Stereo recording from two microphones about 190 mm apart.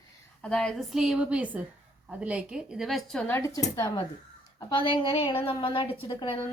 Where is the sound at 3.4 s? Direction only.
15° left (ahead or behind).